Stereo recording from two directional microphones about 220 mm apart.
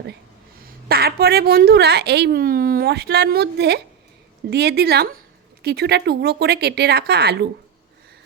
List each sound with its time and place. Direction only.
0.6 s a woman's voice: 45° right (ahead or behind)